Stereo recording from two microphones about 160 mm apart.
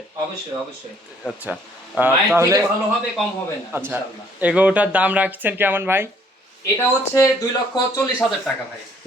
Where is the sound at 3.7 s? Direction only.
10° right (ahead or behind).